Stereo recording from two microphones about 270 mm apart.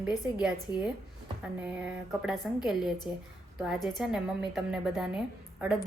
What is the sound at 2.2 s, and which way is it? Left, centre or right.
A woman's voice, centre.